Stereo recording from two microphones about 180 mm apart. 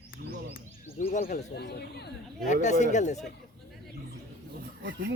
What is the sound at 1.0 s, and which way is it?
Speech, 40° left (ahead or behind).